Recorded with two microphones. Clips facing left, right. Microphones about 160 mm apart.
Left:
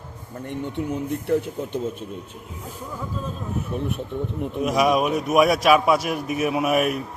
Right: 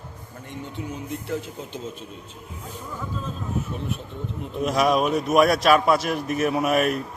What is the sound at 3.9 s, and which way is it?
Speech, 55° left (ahead or behind).